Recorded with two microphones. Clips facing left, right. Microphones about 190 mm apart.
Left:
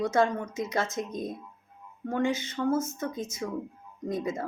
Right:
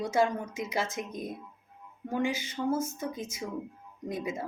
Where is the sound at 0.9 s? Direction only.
25° left (ahead or behind).